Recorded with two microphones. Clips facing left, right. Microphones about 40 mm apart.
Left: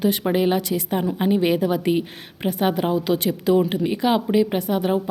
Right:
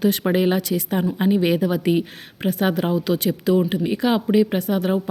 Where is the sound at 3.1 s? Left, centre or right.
Left.